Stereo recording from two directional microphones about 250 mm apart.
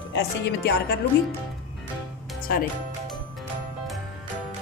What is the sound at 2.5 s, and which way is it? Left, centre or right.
Speech, left.